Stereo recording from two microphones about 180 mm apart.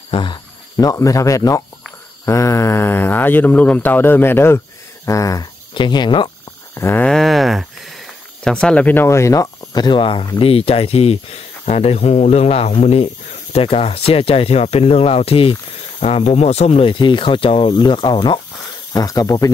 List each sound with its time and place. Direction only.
0.1 s speech: 25° left (ahead or behind)
6.7 s sheep: 15° left (ahead or behind)
8.5 s speech: 5° left (ahead or behind); by 19.5 s 20° left (ahead or behind)